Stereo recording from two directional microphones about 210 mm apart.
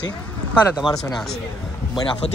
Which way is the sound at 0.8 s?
5° right (ahead or behind).